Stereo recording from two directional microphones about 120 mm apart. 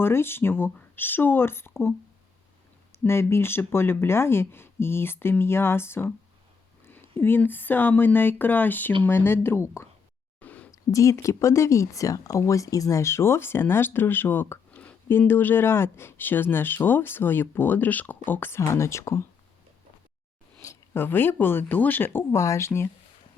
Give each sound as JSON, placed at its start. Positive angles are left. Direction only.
{"t": 0.0, "sound": "speech", "side_deg": 20}
{"t": 2.9, "sound": "speech", "side_deg": 20}
{"t": 10.4, "sound": "a sound", "side_deg": 15}
{"t": 10.7, "sound": "speech", "side_deg": 25}
{"t": 20.6, "sound": "speech", "side_deg": 20}